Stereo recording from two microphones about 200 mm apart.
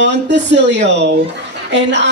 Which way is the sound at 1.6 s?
60° right (ahead or behind).